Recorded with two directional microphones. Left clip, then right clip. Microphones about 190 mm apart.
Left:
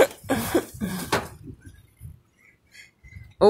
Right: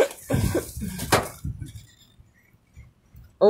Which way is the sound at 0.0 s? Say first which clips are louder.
Left 3 dB; 50° left (ahead or behind).